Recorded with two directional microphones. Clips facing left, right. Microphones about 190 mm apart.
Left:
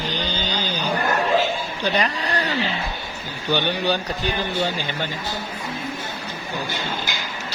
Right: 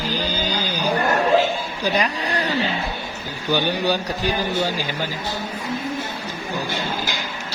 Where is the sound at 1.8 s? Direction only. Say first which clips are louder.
Right 1 dB; 10° right (ahead or behind).